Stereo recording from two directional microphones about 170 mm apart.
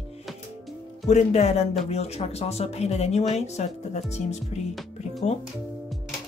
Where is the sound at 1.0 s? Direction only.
40° left (ahead or behind).